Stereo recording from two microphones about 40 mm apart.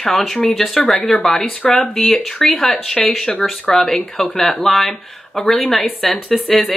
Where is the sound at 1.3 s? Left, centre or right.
Left.